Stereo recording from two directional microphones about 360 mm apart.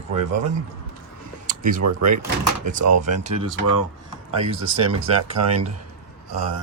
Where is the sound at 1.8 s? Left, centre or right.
Right.